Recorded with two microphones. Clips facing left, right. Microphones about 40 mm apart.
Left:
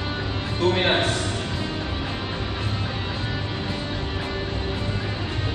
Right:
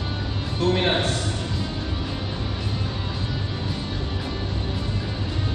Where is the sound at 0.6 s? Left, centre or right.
Centre.